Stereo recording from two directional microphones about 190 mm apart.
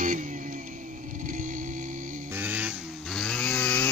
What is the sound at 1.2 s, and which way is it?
Music, 45° right (ahead or behind).